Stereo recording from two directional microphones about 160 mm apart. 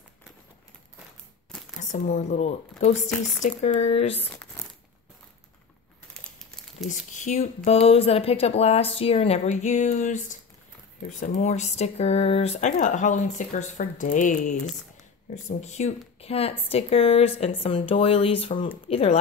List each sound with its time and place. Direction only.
1.8 s speech: 45° left (ahead or behind)
4.2 s crumpling: 10° left (ahead or behind)
7.1 s speech: 50° left (ahead or behind)